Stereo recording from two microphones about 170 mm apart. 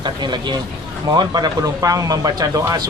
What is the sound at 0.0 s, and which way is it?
Speech, 25° right (ahead or behind).